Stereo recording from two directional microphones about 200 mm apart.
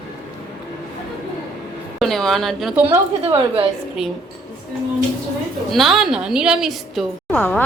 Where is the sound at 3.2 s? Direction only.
30° right (ahead or behind).